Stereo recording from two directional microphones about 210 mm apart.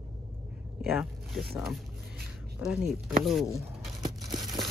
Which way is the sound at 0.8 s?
Centre (ahead or behind).